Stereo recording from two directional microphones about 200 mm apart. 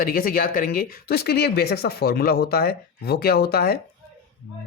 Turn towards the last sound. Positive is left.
turn(degrees=50)  # may be behind; listen again after turning